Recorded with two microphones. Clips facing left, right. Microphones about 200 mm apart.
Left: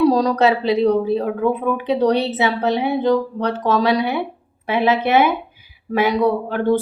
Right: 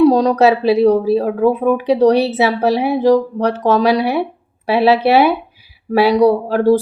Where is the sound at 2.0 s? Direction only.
25° left (ahead or behind).